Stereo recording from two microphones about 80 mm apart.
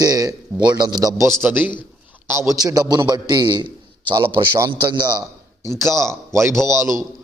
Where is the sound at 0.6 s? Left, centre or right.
Right.